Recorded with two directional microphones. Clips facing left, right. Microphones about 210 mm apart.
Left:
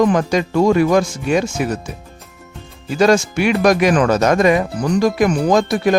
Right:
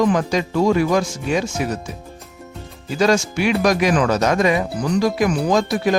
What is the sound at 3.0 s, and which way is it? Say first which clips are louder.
Speech: left 3 dB; 55° left (ahead or behind).